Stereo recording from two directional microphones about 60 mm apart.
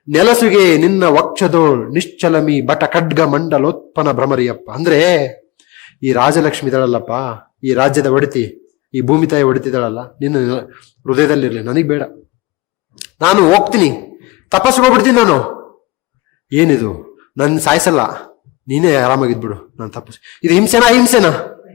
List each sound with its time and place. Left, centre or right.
0.1 s speech: centre